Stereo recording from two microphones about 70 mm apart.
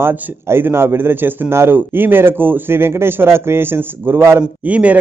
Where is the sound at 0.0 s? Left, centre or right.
Right.